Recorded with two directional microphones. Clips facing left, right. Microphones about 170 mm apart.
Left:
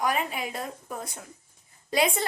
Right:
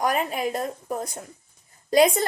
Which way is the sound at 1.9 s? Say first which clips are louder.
Right 7 dB; 40° right (ahead or behind).